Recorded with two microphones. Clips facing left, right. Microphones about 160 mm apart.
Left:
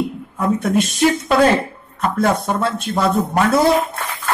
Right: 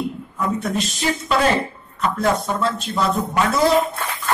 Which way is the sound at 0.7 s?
55° left (ahead or behind).